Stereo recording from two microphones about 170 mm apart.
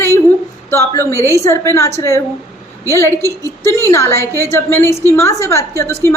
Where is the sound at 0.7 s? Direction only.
15° left (ahead or behind).